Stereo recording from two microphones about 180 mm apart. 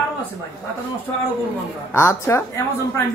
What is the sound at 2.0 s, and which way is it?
Speech, 15° left (ahead or behind).